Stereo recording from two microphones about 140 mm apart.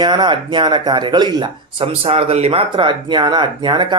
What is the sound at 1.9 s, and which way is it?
Speech, 45° right (ahead or behind).